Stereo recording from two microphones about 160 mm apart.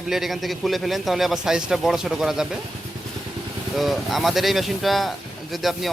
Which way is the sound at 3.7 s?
Centre (ahead or behind).